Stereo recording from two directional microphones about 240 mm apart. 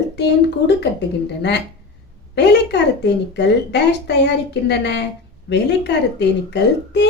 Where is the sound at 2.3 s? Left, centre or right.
Left.